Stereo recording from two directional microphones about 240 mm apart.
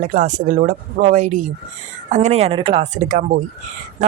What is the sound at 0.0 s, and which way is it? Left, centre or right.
Speech, right.